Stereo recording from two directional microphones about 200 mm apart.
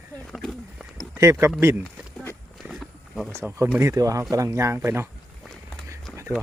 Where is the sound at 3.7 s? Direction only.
15° right (ahead or behind).